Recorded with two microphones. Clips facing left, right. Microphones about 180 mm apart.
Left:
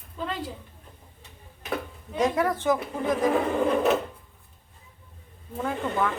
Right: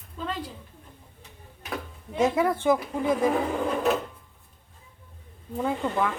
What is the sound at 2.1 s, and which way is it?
A woman's voice, 10° right (ahead or behind).